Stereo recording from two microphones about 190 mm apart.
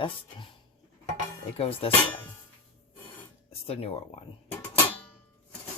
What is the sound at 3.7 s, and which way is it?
Speech, 30° left (ahead or behind).